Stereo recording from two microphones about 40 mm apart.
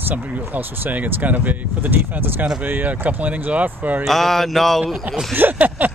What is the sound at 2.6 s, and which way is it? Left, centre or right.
Speech, right.